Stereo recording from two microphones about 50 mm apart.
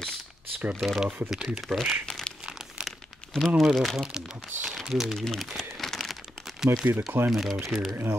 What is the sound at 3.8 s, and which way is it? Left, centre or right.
Speech, centre.